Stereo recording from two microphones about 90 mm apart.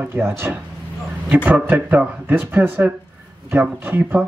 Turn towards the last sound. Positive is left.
turn(degrees=-20)  # may be behind; listen again after turning